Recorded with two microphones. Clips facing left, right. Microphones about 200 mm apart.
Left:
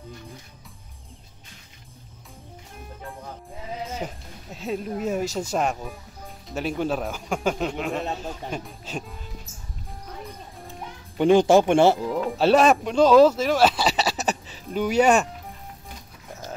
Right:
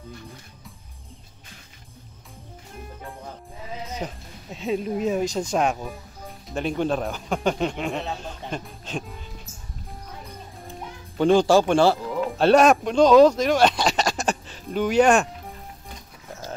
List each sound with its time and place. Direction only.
4.0 s speech: 5° left (ahead or behind)
11.1 s speech: 15° left (ahead or behind)
12.4 s speech: centre (ahead or behind)